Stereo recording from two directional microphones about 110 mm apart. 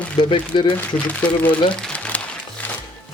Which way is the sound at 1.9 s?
10° left (ahead or behind).